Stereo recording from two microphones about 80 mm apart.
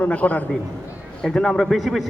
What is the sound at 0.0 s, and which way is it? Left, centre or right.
Speech, centre.